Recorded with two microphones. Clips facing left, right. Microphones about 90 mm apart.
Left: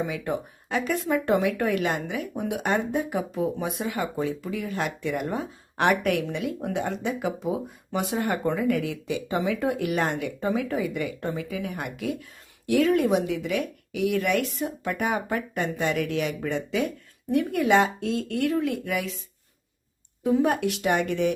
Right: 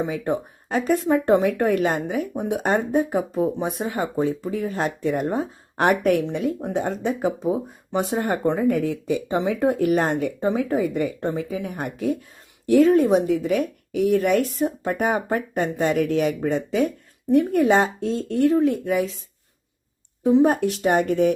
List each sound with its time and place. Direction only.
0.1 s a woman's voice: 40° right (ahead or behind)
20.2 s a woman's voice: 30° right (ahead or behind)